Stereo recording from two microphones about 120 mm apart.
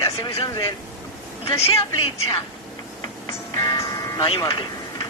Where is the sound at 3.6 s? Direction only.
30° left (ahead or behind).